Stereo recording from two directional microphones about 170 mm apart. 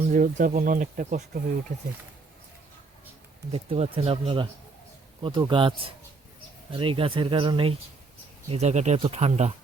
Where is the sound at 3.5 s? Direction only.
35° right (ahead or behind).